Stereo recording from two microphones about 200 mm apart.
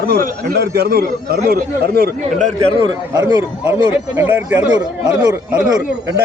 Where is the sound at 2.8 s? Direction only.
20° right (ahead or behind).